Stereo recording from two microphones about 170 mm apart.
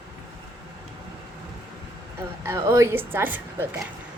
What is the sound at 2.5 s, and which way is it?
Speech, 15° right (ahead or behind).